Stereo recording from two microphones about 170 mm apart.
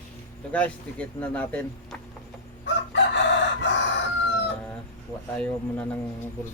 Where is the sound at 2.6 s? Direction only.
90° left.